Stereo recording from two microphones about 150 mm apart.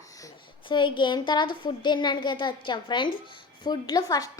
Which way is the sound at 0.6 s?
30° left (ahead or behind).